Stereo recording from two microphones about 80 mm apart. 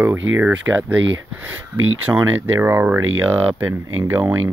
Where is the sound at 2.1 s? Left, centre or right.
Right.